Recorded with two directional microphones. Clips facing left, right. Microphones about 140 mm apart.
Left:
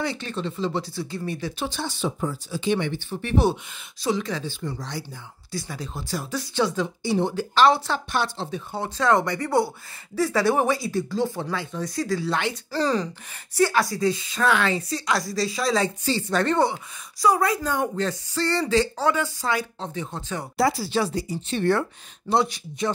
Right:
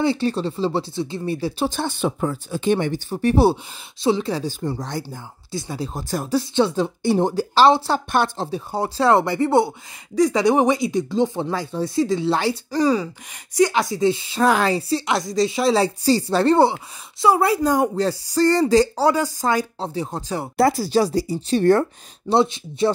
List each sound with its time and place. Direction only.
0.0 s speech: 30° right (ahead or behind)
1.7 s speech: 55° right (ahead or behind)
5.5 s speech: 25° right (ahead or behind)
5.9 s speech: 45° right (ahead or behind)
6.3 s speech: 30° right (ahead or behind)
7.0 s speech: 50° right (ahead or behind); by 8.0 s 30° right (ahead or behind)
8.1 s speech: 50° right (ahead or behind)
8.5 s speech: 35° right (ahead or behind)
11.5 s speech: 35° right (ahead or behind)
12.7 s speech: 10° right (ahead or behind); by 20.4 s 40° right (ahead or behind)
20.5 s speech: 50° right (ahead or behind)
22.3 s speech: 25° right (ahead or behind)